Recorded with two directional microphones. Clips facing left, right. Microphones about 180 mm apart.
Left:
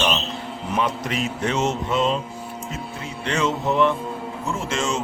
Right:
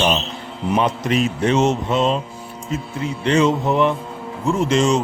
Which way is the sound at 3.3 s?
15° right (ahead or behind).